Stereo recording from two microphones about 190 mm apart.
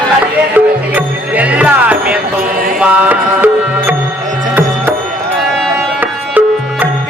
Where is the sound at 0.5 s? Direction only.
10° right (ahead or behind).